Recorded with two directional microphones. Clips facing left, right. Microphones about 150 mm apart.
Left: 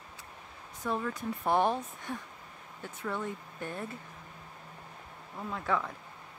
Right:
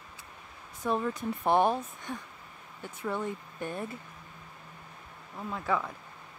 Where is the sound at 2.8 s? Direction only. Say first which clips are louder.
Right 2 dB; 15° right (ahead or behind).